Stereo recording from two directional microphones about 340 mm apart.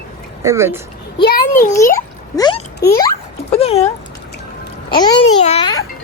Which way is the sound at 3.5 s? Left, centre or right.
Centre.